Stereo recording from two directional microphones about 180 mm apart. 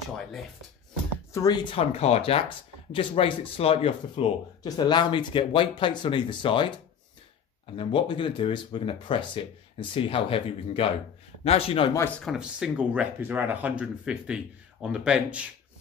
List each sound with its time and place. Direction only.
1.3 s speech: 20° left (ahead or behind)
7.7 s speech: 30° left (ahead or behind)
12.3 s speech: 5° right (ahead or behind)